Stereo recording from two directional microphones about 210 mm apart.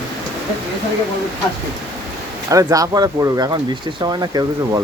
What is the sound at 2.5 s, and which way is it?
Speech, 15° right (ahead or behind).